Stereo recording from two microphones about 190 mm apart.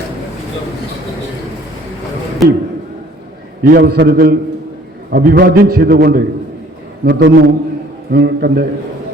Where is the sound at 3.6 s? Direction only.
55° right (ahead or behind).